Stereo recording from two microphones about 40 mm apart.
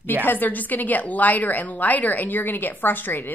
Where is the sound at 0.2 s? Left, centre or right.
Left.